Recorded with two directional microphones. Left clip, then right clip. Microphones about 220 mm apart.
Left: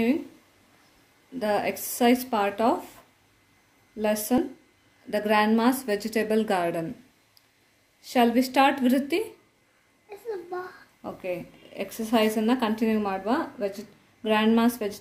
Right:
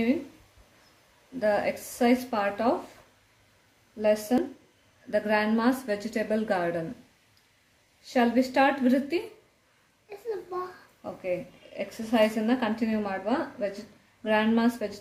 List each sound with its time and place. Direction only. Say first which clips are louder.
1.4 s speech: even; 30° left (ahead or behind)
4.0 s speech: right 1 dB; 30° left (ahead or behind)
8.0 s speech: left 2 dB; 35° left (ahead or behind)
11.0 s speech: right 1 dB; 35° left (ahead or behind)